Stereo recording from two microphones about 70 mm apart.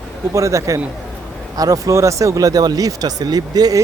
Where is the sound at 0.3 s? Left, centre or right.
Right.